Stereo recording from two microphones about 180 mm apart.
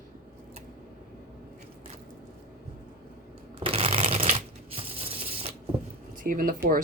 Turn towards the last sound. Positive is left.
turn(degrees=-50)  # may be behind; listen again after turning